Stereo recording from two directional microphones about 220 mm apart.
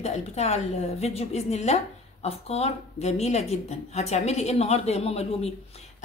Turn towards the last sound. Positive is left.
turn(degrees=30)  # may be behind; listen again after turning